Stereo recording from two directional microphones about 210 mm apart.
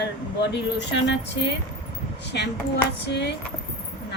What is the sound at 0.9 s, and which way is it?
Speech, 55° left (ahead or behind).